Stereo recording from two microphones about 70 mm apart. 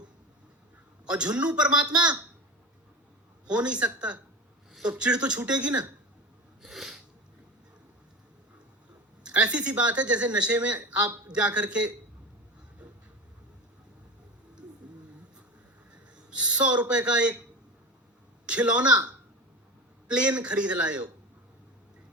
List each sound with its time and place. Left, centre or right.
1.0 s speech: centre
3.4 s speech: centre
6.6 s sneeze: centre
9.2 s speech: centre
15.9 s a sound: centre
16.9 s speech: centre
18.4 s speech: centre